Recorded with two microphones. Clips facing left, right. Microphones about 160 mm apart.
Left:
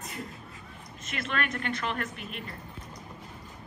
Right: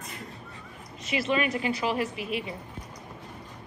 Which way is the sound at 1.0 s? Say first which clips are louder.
Right 6 dB; 5° right (ahead or behind).